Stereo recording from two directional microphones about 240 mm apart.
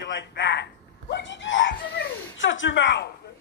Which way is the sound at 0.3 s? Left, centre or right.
Left.